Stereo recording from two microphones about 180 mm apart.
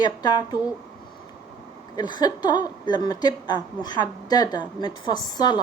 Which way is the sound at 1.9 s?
25° left (ahead or behind).